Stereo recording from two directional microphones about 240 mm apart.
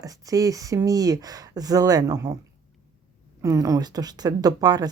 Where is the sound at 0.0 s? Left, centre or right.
Centre.